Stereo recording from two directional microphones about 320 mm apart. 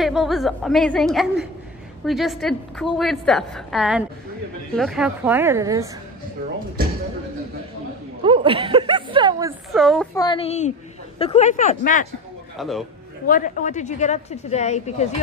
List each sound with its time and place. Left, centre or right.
0.0 s a woman's voice: centre
8.2 s speech: centre
9.7 s a woman's voice: centre
10.1 s a woman's voice: centre
12.5 s a man's voice: centre
13.3 s a woman's voice: left